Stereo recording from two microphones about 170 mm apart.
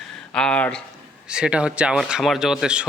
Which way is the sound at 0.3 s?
5° left (ahead or behind).